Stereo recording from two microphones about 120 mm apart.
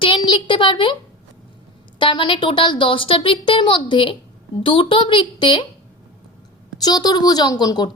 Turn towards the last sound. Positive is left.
turn(degrees=35)  # may be behind; listen again after turning